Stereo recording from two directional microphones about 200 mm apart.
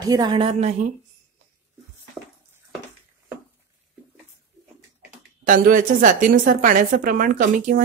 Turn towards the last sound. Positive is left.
turn(degrees=-40)  # may be behind; listen again after turning